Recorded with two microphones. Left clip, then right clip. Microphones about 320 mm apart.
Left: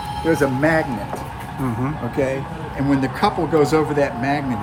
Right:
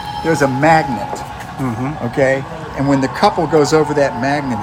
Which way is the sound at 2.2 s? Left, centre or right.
Right.